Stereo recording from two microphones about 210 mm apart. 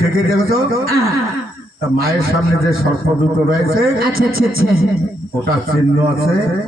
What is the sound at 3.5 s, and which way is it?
Speech, 45° right (ahead or behind).